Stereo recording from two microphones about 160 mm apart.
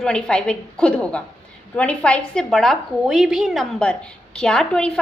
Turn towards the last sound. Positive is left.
turn(degrees=5)  # may be behind; listen again after turning